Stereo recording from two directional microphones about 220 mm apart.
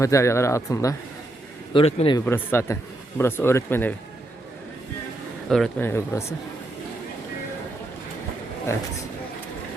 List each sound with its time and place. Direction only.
0.0 s speech: 15° left (ahead or behind)
1.7 s a man's voice: 25° left (ahead or behind)
2.2 s speech: 10° left (ahead or behind)
5.5 s speech: centre (ahead or behind)